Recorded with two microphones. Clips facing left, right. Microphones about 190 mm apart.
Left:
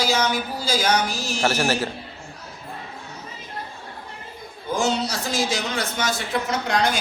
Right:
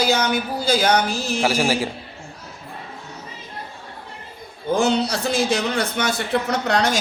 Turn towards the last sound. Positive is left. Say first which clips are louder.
# right 2 dB
turn(degrees=-70)  # may be behind; listen again after turning